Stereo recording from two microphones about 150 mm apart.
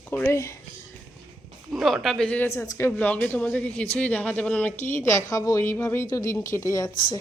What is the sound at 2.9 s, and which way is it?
A woman's voice, 10° left (ahead or behind).